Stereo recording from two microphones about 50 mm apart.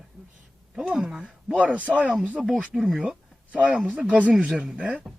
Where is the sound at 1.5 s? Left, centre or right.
Right.